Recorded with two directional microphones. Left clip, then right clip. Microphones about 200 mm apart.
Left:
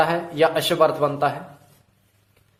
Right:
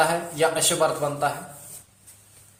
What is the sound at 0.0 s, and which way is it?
Speech, 50° left (ahead or behind).